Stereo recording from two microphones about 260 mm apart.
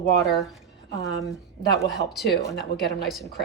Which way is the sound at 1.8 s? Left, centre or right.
Centre.